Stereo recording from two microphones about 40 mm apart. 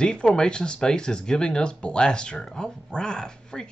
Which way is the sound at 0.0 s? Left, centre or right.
Left.